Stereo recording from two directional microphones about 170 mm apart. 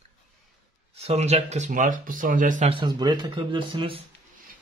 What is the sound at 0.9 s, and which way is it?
Speech, 40° right (ahead or behind).